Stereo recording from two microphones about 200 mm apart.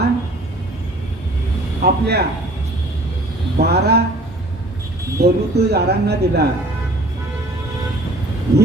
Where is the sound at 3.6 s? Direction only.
55° right (ahead or behind).